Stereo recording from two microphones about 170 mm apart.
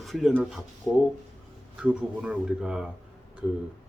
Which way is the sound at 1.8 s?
5° right (ahead or behind).